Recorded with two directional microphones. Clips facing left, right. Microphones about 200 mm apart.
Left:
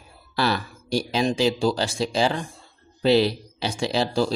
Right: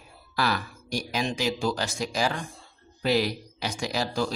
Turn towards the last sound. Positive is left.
turn(degrees=30)  # may be behind; listen again after turning